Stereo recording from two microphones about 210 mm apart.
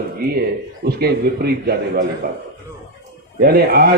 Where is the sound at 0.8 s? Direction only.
50° right (ahead or behind).